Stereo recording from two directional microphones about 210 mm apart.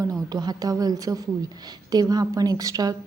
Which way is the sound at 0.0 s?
15° right (ahead or behind).